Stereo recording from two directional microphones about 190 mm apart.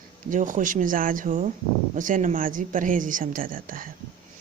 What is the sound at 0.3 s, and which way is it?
Speech, 45° right (ahead or behind).